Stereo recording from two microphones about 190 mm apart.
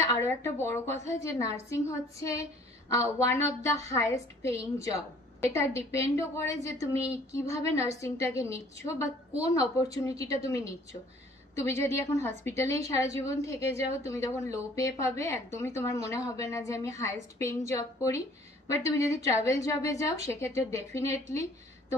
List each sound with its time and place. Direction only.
0.0 s a woman's voice: 15° left (ahead or behind)